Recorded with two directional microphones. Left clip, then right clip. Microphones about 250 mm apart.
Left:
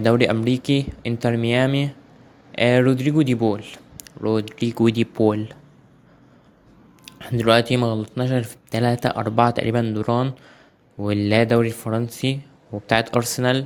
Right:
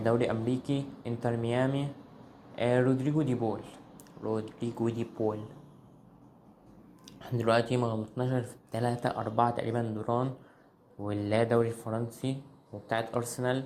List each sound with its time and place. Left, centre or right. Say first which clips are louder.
0.0 s speech: left 10 dB; left
7.4 s speech: left 10 dB; left